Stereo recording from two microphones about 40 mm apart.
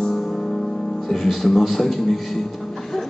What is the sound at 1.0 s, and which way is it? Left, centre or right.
Music, centre.